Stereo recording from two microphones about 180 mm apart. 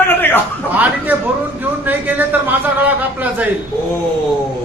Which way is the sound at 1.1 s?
10° right (ahead or behind).